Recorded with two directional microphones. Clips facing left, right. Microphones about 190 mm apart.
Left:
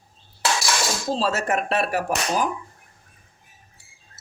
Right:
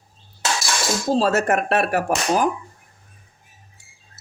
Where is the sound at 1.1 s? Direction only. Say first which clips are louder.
Right 5 dB; 50° right (ahead or behind).